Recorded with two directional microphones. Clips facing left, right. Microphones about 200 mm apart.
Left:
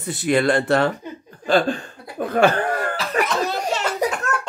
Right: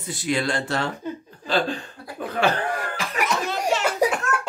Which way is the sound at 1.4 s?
50° left (ahead or behind).